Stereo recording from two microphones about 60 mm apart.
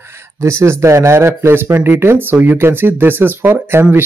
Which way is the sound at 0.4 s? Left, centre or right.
Right.